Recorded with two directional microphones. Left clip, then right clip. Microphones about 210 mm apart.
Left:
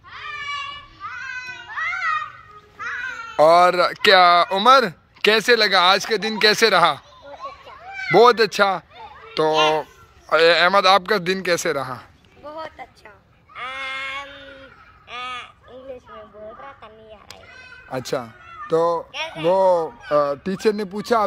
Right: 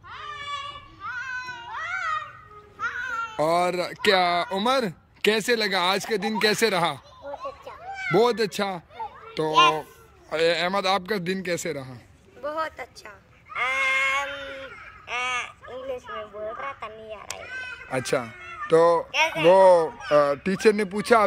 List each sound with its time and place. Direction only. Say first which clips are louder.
1.0 s a sound: left 1 dB; 40° right (ahead or behind)
2.8 s music: even; 40° right (ahead or behind)
3.3 s speech: left 10 dB; 5° right (ahead or behind)
8.1 s a child's voice: left 8 dB; 5° right (ahead or behind)
13.5 s sheep: right 6 dB; 20° right (ahead or behind)
15.0 s a sound: right 3 dB; 20° right (ahead or behind)
17.8 s speech: left 1 dB; centre (ahead or behind)
19.1 s speech: right 3 dB; 20° right (ahead or behind)
19.5 s speech: even; 5° right (ahead or behind)